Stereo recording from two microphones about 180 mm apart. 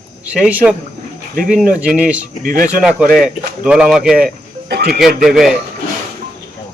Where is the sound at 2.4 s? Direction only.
50° right (ahead or behind).